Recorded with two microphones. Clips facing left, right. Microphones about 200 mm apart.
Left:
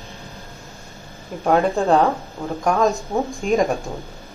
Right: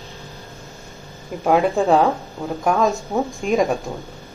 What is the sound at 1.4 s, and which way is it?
Speech, 5° right (ahead or behind).